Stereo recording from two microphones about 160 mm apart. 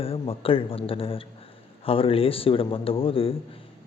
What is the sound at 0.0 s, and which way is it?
Speech, 35° left (ahead or behind).